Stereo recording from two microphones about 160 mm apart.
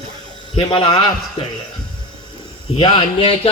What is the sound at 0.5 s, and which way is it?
Speech, 35° left (ahead or behind).